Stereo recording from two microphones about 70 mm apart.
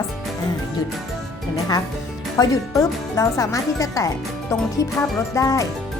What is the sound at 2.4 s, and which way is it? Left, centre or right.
A woman's voice, left.